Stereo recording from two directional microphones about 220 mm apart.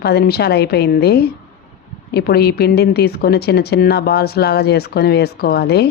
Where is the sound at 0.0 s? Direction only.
45° left (ahead or behind).